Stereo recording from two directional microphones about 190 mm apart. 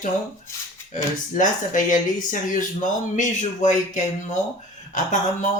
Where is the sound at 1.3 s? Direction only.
40° left (ahead or behind).